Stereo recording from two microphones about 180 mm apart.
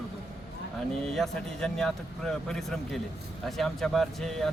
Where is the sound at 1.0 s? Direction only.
Centre (ahead or behind).